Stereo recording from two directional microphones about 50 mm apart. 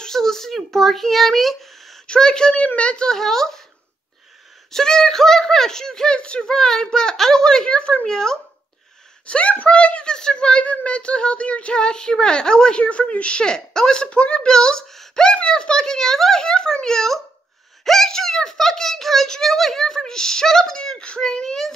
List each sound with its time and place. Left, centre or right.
0.0 s a sound: centre
0.7 s a child's voice: centre
2.0 s a child's voice: centre
2.5 s speech: left
3.1 s a child's voice: centre
4.6 s a child's voice: centre